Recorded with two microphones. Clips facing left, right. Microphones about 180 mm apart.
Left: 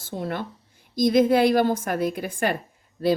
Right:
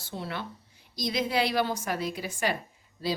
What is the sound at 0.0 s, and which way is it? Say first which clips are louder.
A woman's voice: left 6 dB; 50° left (ahead or behind).